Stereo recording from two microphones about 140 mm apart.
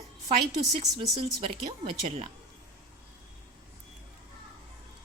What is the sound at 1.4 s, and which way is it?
Speech, 40° right (ahead or behind).